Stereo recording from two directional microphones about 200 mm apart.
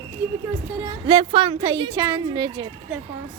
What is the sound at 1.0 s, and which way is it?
Speech, 25° right (ahead or behind).